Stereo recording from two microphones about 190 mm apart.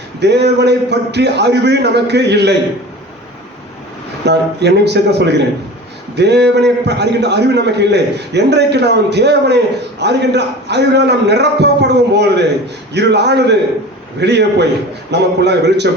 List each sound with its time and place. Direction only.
0.2 s a man's voice: 60° right (ahead or behind)
4.3 s a man's voice: 60° right (ahead or behind)